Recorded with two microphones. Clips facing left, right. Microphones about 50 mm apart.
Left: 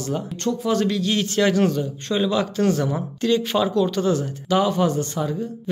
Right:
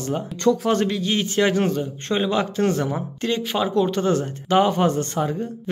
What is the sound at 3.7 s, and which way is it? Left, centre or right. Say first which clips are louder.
Speech: even; right.